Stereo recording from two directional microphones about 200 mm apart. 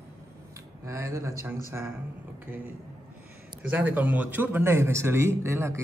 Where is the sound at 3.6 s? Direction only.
10° right (ahead or behind).